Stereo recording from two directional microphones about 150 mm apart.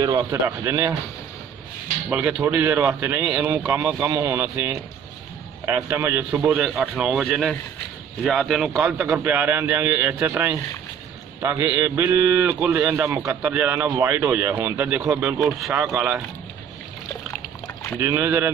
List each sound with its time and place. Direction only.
0.0 s speech: 25° right (ahead or behind)
2.0 s a man's voice: 10° right (ahead or behind)
18.0 s speech: 15° right (ahead or behind)